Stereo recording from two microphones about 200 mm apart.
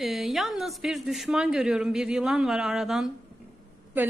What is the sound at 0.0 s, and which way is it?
A woman's voice, centre (ahead or behind).